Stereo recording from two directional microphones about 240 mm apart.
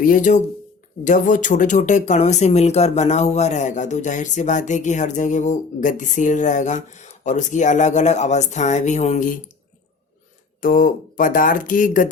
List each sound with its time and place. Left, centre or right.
0.0 s speech: left
10.6 s speech: left